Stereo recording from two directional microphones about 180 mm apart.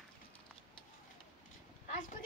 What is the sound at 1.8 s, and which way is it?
Vehicle, 40° left (ahead or behind).